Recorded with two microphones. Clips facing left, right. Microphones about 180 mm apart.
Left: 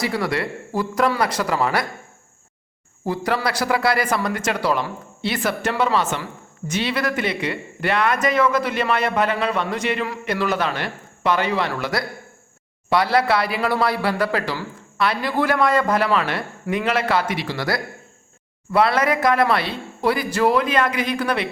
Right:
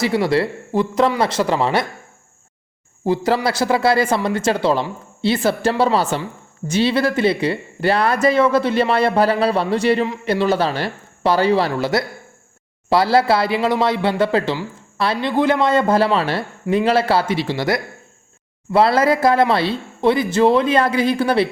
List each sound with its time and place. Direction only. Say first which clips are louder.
0.0 s speech: right 6 dB; 25° right (ahead or behind)
3.0 s speech: right 5 dB; 25° right (ahead or behind)